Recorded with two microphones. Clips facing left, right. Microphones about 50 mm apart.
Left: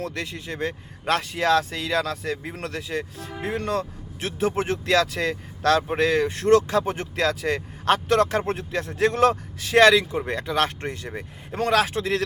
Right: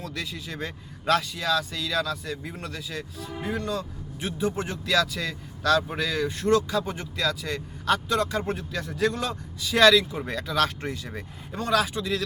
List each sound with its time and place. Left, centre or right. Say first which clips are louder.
0.0 s a man's voice: left 4 dB; left
4.9 s speech: left 2 dB; left
8.0 s speech: left 5 dB; left
11.7 s speech: left 2 dB; left